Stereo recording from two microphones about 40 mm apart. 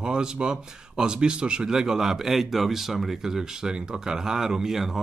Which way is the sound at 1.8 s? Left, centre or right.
Centre.